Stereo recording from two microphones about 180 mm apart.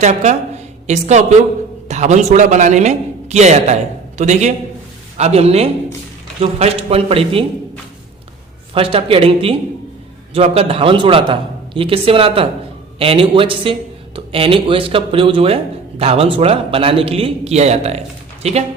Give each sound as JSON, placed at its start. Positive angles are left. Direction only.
{"t": 0.0, "sound": "a woman's voice", "side_deg": -40}
{"t": 8.7, "sound": "a man's voice", "side_deg": -30}